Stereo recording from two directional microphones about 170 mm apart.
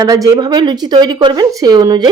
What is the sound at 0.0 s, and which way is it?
Speech, 20° right (ahead or behind).